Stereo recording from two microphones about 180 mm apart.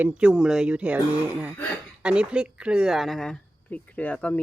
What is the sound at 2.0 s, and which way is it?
Speech, 5° right (ahead or behind).